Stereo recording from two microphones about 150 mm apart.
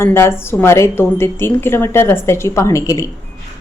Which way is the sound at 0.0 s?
15° left (ahead or behind).